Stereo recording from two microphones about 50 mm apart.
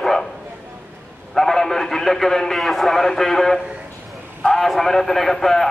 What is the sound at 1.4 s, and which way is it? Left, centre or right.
A man's voice, centre.